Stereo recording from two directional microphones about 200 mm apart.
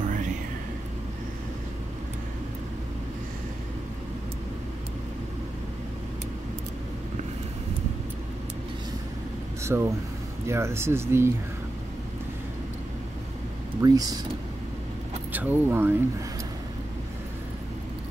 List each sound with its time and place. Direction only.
9.6 s a sound: 15° right (ahead or behind)
10.4 s speech: 15° right (ahead or behind)
13.7 s speech: 20° right (ahead or behind)
15.3 s speech: 10° right (ahead or behind)